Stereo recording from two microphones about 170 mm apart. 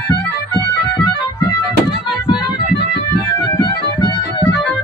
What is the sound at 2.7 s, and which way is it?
Music, 75° left (ahead or behind).